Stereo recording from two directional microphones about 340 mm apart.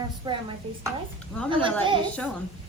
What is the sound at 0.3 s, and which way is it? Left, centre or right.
Speech, centre.